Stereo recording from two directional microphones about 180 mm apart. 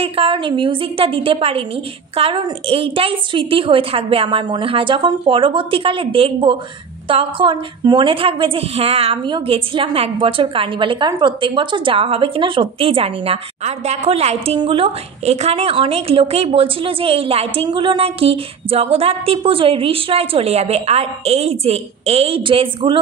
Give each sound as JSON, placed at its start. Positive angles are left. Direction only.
{"t": 0.0, "sound": "a woman's voice", "side_deg": -30}